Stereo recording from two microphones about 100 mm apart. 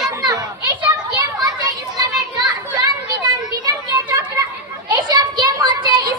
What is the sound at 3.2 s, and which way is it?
Children playing, 40° right (ahead or behind).